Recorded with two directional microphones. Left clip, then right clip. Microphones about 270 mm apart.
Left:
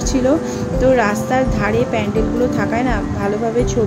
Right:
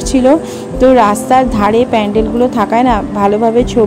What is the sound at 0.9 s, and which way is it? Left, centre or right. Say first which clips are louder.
Speech: right 7 dB; right.